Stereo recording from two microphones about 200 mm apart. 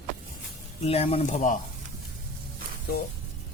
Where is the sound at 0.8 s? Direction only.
30° left (ahead or behind).